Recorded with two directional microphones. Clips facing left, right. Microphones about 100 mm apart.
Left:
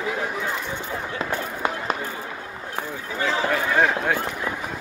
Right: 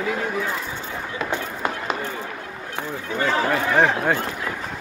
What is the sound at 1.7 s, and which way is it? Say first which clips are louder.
Run: even; 5° left (ahead or behind).